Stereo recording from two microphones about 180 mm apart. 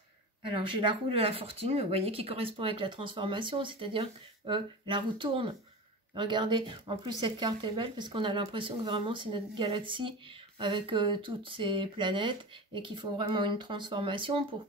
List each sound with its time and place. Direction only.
0.5 s speech: 25° right (ahead or behind)